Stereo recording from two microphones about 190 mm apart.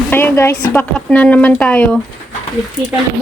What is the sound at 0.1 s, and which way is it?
A woman's voice, 10° left (ahead or behind).